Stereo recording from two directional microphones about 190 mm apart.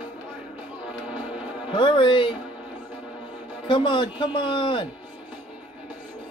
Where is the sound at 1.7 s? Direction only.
25° left (ahead or behind).